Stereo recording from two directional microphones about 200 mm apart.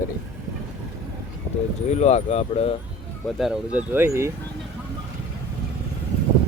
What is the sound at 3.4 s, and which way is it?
Speech, 5° right (ahead or behind).